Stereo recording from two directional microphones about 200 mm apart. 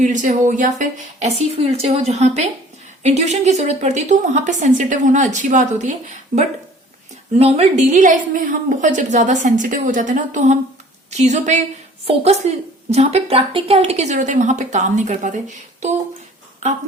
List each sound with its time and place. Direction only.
0.0 s a woman's voice: 40° right (ahead or behind)